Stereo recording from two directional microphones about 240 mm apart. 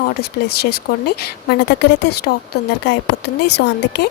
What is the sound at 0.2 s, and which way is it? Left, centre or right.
A woman's voice, left.